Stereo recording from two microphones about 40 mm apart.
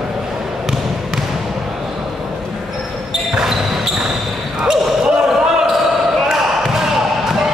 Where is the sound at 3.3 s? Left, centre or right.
Centre.